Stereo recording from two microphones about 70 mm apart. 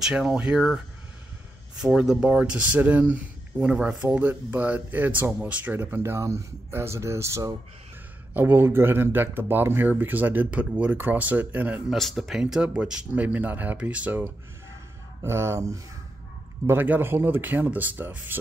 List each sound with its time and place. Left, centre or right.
0.0 s speech: centre
1.8 s speech: centre; by 7.4 s right
8.3 s speech: right
11.9 s speech: centre; by 14.3 s right
15.2 s speech: right
16.6 s speech: right